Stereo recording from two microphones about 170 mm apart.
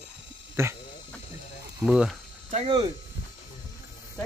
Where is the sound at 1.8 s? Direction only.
5° right (ahead or behind).